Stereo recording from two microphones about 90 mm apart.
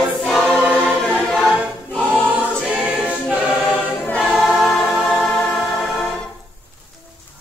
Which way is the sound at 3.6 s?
15° left (ahead or behind).